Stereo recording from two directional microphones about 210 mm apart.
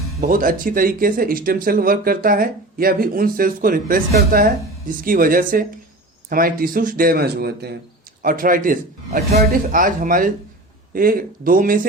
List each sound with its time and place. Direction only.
0.2 s speech: 40° right (ahead or behind)